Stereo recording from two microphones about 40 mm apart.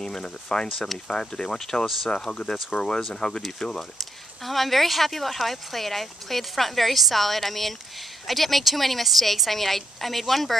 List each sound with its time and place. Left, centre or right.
0.0 s speech: centre
4.0 s speech: centre